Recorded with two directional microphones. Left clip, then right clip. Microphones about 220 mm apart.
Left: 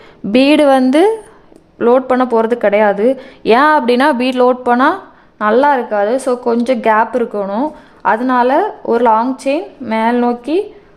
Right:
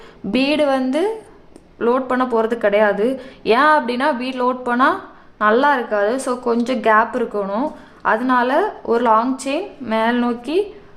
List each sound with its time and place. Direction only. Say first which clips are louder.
0.3 s a woman's voice: left 8 dB; 35° left (ahead or behind)